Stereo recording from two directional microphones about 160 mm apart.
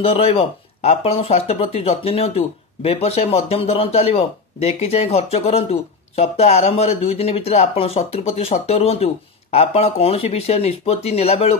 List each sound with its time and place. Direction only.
0.0 s speech: 40° left (ahead or behind)